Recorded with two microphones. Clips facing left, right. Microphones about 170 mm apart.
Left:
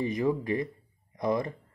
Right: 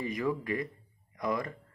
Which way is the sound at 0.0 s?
25° left (ahead or behind).